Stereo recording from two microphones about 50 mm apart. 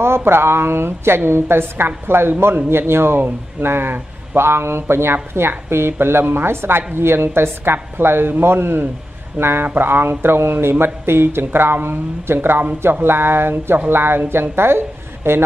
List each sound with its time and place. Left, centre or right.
0.0 s a woman's voice: right